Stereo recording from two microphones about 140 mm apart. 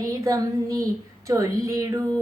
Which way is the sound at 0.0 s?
25° right (ahead or behind).